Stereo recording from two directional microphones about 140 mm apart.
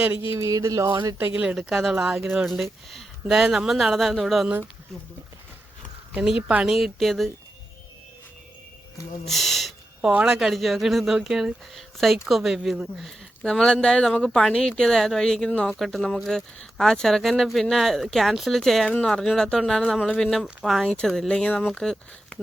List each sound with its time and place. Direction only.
0.3 s speech: 20° right (ahead or behind)
0.9 s speech: 35° right (ahead or behind)
1.2 s speech: 10° right (ahead or behind)
6.1 s speech: 5° right (ahead or behind)
9.2 s speech: centre (ahead or behind)